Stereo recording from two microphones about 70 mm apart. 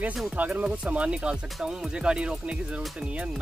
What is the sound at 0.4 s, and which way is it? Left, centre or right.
Speech, centre.